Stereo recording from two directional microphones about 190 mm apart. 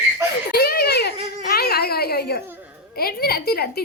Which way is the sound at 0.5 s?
55° left (ahead or behind).